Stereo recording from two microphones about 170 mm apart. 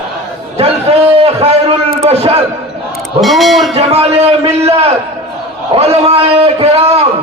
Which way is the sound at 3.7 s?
35° right (ahead or behind).